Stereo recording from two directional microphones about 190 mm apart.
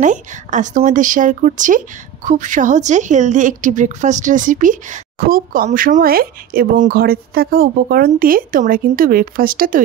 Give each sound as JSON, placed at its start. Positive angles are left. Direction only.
{"t": 0.0, "sound": "a woman's voice", "side_deg": -40}